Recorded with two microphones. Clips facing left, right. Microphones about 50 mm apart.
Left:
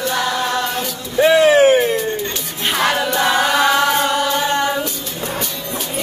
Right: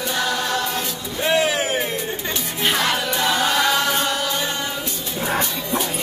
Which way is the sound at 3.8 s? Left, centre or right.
Centre.